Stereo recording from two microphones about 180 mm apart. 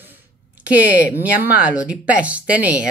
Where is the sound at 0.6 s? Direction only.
10° right (ahead or behind).